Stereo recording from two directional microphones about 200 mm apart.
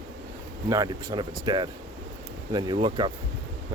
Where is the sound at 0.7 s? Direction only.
20° right (ahead or behind).